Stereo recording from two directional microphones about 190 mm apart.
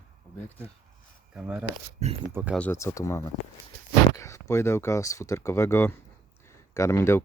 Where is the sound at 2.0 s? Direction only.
35° right (ahead or behind).